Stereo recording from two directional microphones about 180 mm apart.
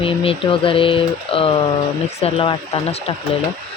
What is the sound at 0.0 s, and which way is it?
Speech, 30° left (ahead or behind).